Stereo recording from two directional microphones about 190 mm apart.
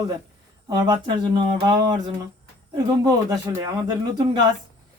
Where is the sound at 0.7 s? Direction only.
20° right (ahead or behind).